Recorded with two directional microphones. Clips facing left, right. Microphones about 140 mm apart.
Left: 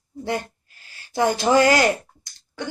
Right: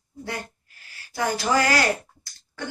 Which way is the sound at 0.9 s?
25° left (ahead or behind).